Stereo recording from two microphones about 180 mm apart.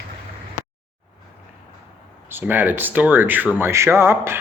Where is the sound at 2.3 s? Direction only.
10° right (ahead or behind).